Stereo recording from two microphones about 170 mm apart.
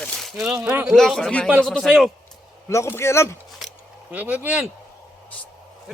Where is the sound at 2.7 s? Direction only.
15° left (ahead or behind).